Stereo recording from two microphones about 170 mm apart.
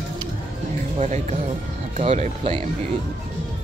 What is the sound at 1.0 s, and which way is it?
Speech, 45° right (ahead or behind).